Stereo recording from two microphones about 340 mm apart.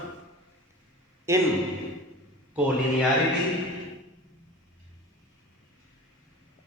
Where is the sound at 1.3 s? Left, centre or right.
Centre.